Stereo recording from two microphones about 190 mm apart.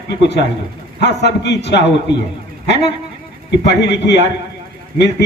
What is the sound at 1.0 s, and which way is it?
A man's voice, 65° left (ahead or behind).